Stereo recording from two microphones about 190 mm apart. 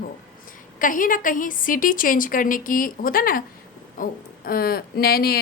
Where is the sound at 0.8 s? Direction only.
45° left (ahead or behind).